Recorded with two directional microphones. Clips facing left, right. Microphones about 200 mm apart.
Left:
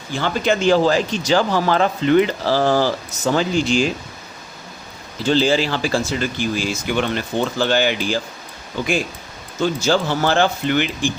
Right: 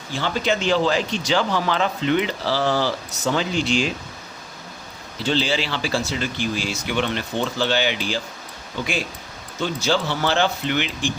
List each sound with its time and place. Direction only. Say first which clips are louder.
0.2 s speech: left 4 dB; 50° left (ahead or behind)
5.2 s speech: left 6 dB; 45° left (ahead or behind)
9.6 s speech: left 4 dB; 45° left (ahead or behind)